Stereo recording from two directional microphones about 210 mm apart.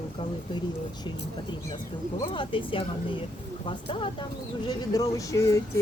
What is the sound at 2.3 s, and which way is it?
Speech, 25° left (ahead or behind).